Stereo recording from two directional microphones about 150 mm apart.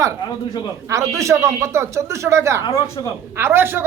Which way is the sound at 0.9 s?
20° right (ahead or behind).